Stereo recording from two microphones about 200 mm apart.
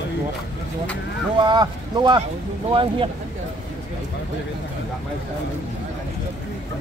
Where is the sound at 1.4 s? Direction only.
20° right (ahead or behind).